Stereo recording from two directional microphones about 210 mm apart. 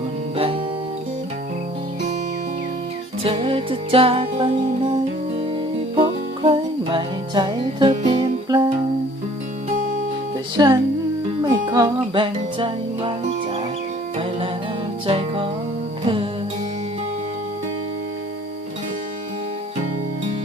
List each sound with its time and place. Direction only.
0.3 s music: 25° right (ahead or behind)
3.2 s music: 25° right (ahead or behind)
6.0 s music: 25° right (ahead or behind)
9.6 s music: 35° right (ahead or behind)
10.6 s music: 20° right (ahead or behind)
15.0 s music: 25° right (ahead or behind)